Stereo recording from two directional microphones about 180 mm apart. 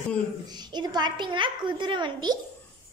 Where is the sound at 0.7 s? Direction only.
25° right (ahead or behind).